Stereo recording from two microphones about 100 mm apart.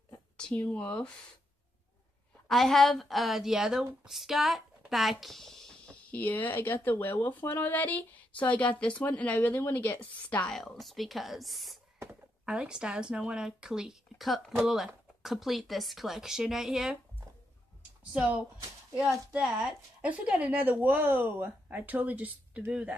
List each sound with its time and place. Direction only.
0.4 s speech: 10° left (ahead or behind)
2.4 s speech: 5° left (ahead or behind); by 9.9 s 20° left (ahead or behind)
10.5 s a woman's voice: centre (ahead or behind)
18.1 s a woman's voice: 15° right (ahead or behind)